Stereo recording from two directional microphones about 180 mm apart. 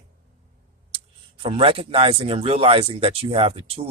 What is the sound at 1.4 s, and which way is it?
Speech, 30° right (ahead or behind).